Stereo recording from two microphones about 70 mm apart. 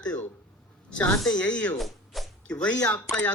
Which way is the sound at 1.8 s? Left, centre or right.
Centre.